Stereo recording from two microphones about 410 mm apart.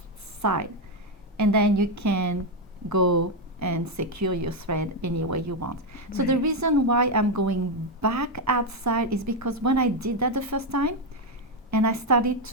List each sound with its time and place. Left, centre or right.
0.4 s a woman's voice: right